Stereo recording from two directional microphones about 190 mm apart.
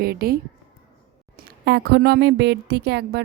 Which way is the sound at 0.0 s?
55° right (ahead or behind).